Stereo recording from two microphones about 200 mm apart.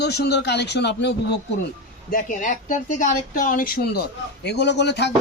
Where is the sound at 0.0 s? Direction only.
55° left (ahead or behind).